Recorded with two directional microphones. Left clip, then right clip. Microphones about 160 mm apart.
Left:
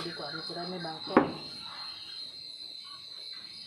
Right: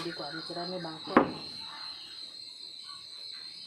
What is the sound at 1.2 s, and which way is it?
Speech, 35° right (ahead or behind).